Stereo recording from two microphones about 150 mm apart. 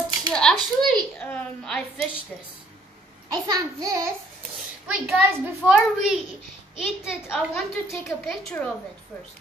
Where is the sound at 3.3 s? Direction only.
25° right (ahead or behind).